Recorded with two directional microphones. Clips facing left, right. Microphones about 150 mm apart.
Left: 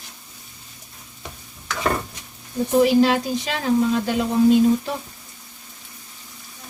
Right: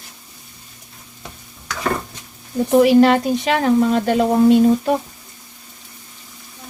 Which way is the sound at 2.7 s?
65° right (ahead or behind).